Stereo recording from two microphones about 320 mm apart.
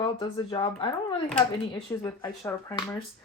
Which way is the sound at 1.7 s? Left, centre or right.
Centre.